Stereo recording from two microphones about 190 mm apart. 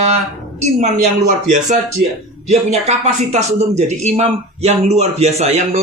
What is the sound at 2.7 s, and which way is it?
Speech, 35° right (ahead or behind).